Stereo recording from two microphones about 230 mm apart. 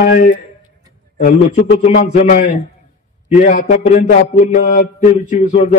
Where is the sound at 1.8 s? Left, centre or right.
Left.